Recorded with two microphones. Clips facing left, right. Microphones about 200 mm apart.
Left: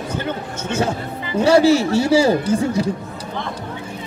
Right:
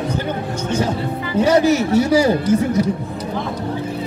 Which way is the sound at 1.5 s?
30° left (ahead or behind).